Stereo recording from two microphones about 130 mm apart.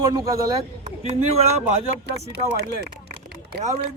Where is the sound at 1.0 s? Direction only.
55° right (ahead or behind).